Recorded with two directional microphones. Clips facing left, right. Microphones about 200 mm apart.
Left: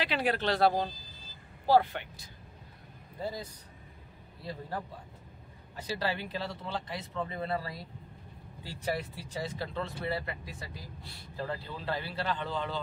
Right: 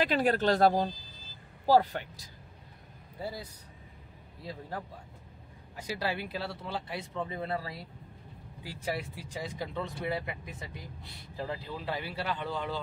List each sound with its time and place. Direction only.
0.0 s speech: 45° right (ahead or behind)
3.2 s a man's voice: 10° right (ahead or behind)
5.8 s speech: 10° right (ahead or behind)